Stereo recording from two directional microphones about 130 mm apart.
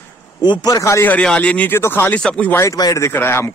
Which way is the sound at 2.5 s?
25° left (ahead or behind).